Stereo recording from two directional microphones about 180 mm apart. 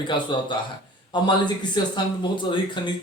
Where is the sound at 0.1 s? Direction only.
25° left (ahead or behind).